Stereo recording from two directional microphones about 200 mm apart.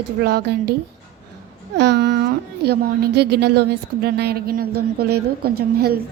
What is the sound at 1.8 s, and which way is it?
A woman's voice, 60° right (ahead or behind).